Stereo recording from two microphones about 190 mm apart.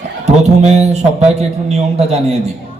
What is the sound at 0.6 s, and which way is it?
A man's voice, 35° right (ahead or behind).